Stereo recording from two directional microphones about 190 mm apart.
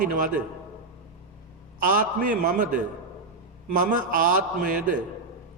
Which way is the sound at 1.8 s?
45° right (ahead or behind).